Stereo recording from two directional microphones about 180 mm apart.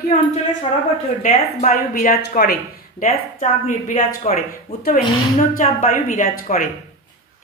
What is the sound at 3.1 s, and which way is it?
A woman's voice, 45° left (ahead or behind).